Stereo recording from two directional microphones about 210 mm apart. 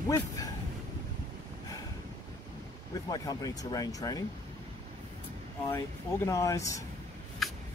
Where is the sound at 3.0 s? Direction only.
15° left (ahead or behind).